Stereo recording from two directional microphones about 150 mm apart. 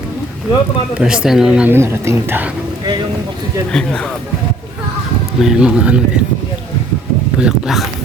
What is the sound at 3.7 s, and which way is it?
Speech, 5° left (ahead or behind).